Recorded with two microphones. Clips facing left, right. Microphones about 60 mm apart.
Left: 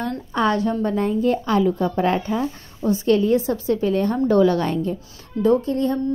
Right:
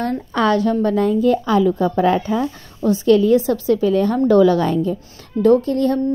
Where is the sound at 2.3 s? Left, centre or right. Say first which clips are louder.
Right 3 dB; right.